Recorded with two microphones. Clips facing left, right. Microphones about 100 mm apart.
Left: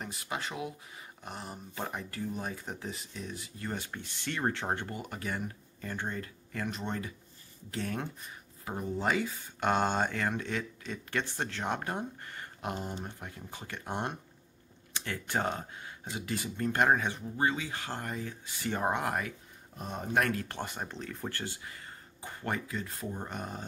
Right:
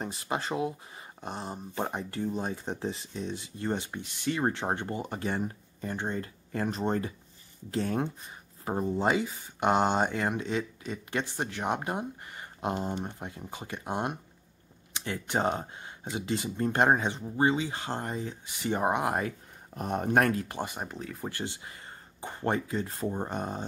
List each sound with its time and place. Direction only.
0.0 s speech: 30° right (ahead or behind)
19.8 s speech: 60° right (ahead or behind)
20.4 s speech: 15° right (ahead or behind)
21.4 s speech: 20° right (ahead or behind)